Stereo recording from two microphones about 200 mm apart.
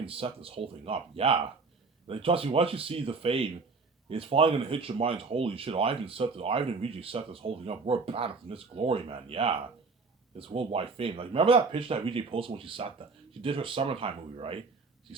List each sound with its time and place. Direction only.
0.0 s speech: 30° right (ahead or behind)